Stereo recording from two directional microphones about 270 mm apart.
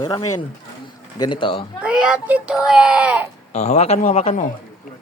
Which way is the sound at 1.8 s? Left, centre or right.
Centre.